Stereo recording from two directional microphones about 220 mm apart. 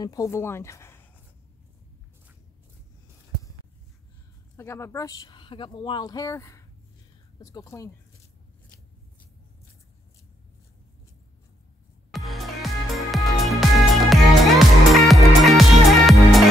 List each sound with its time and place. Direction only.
0.0 s speech: 15° left (ahead or behind)
4.6 s speech: 10° left (ahead or behind)
12.1 s music: centre (ahead or behind)